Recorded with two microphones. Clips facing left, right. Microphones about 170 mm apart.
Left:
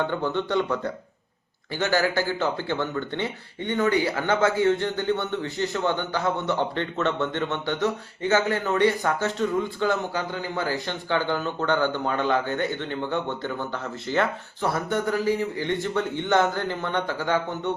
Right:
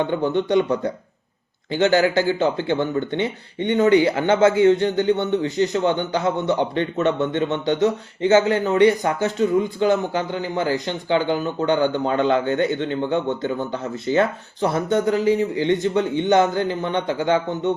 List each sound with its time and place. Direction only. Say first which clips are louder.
0.0 s speech: right 5 dB; 20° right (ahead or behind)
1.7 s speech: right 6 dB; 20° right (ahead or behind)